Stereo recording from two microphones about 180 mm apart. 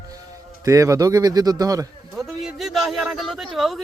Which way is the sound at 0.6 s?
15° right (ahead or behind).